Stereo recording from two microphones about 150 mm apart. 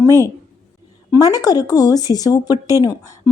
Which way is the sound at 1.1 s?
25° left (ahead or behind).